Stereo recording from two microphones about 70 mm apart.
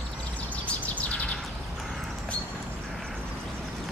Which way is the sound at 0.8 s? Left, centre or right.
Left.